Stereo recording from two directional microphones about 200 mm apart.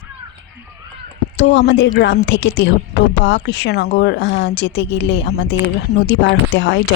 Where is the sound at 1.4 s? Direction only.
60° left (ahead or behind).